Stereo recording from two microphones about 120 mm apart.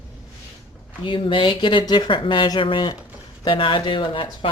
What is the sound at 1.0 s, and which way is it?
Speech, 45° left (ahead or behind).